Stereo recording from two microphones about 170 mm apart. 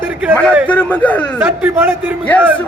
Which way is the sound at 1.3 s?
10° right (ahead or behind).